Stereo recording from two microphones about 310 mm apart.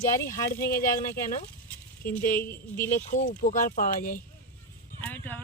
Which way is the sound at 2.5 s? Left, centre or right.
Centre.